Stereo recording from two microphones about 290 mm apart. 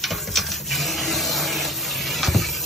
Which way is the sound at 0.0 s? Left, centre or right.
Centre.